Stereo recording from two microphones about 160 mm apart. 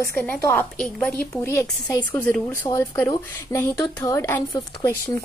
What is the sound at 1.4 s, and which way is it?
A woman's voice, 15° left (ahead or behind).